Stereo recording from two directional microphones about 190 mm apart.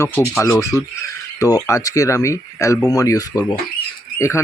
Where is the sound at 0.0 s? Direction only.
10° left (ahead or behind).